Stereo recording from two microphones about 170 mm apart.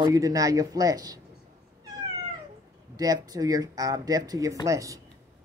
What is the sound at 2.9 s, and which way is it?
Speech, 20° right (ahead or behind).